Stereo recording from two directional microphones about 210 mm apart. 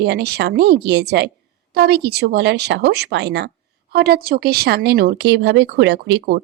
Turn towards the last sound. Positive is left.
turn(degrees=-50)  # may be behind; listen again after turning